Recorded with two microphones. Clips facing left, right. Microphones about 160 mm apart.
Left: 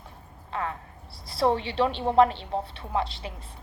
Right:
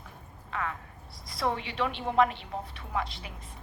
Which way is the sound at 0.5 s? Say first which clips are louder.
Left 3 dB; 30° left (ahead or behind).